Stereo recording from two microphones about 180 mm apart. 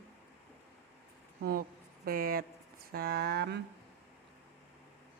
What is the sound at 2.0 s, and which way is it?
Speech, 55° right (ahead or behind).